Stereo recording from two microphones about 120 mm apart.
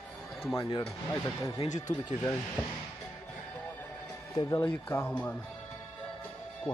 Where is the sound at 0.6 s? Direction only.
40° left (ahead or behind).